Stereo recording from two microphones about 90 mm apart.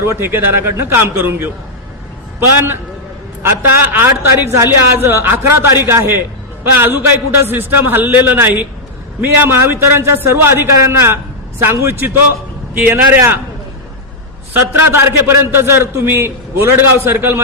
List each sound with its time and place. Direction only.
0.0 s a man's voice: 30° right (ahead or behind)
3.4 s a man's voice: 25° right (ahead or behind)
14.5 s a man's voice: 25° right (ahead or behind)